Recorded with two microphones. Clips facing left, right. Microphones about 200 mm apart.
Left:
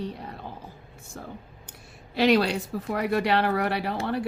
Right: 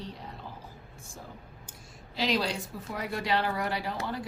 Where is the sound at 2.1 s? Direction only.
65° left (ahead or behind).